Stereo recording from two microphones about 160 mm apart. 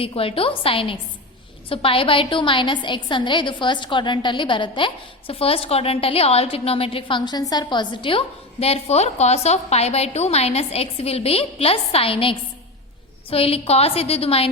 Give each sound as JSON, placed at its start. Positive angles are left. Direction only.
{"t": 0.0, "sound": "a woman's voice", "side_deg": 35}